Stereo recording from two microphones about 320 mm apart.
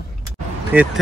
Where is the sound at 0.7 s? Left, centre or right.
Centre.